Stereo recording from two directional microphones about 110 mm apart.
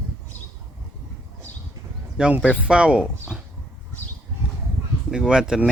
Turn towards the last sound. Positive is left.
turn(degrees=-5)  # may be behind; listen again after turning